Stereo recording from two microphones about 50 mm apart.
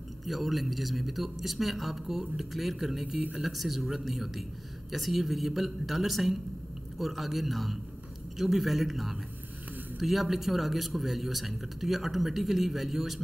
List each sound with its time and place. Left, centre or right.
0.2 s a man's voice: centre